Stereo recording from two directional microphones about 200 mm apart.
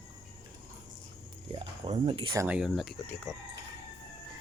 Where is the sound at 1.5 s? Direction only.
25° right (ahead or behind).